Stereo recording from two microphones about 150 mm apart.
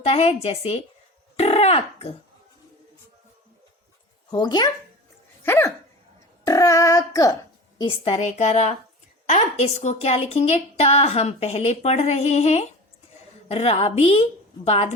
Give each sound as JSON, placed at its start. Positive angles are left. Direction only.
{"t": 0.0, "sound": "a woman's voice", "side_deg": 45}
{"t": 4.3, "sound": "speech", "side_deg": 30}
{"t": 5.4, "sound": "hiccup", "side_deg": 15}
{"t": 6.4, "sound": "speech", "side_deg": 20}
{"t": 7.8, "sound": "a woman's voice", "side_deg": 35}